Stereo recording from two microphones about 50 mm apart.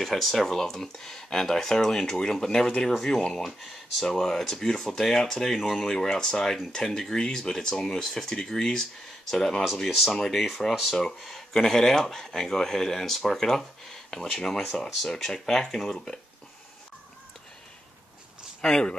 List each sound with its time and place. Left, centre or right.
0.0 s speech: centre
2.9 s speech: centre
18.6 s speech: centre